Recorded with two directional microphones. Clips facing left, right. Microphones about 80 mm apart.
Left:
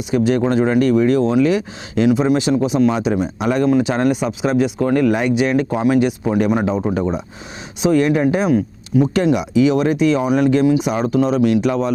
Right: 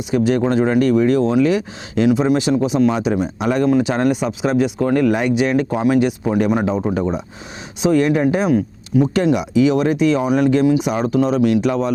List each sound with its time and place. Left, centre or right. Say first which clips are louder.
0.1 s speech: even; centre